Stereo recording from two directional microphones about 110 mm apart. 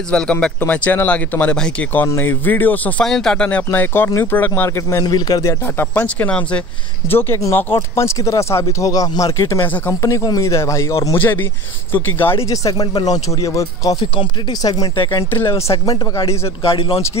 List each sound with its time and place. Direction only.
0.1 s speech: 10° left (ahead or behind)
3.1 s speech: 5° left (ahead or behind)
4.6 s speech: 30° left (ahead or behind)
5.9 s speech: 15° left (ahead or behind)
12.4 s a man's voice: 30° left (ahead or behind)
15.3 s a man's voice: 25° left (ahead or behind)
16.6 s speech: 55° left (ahead or behind)